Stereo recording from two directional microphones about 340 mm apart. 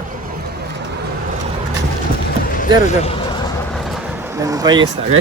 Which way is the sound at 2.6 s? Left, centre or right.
Centre.